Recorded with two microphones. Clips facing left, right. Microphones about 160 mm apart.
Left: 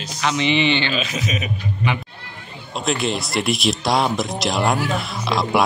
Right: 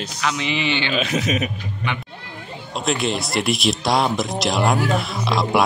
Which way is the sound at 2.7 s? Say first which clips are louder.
Even; centre (ahead or behind).